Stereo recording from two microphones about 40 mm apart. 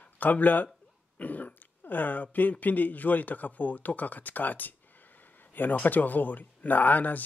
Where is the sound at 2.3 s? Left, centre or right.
Left.